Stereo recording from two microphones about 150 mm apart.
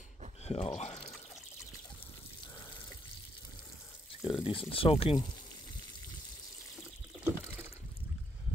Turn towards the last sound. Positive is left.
turn(degrees=-5)  # may be behind; listen again after turning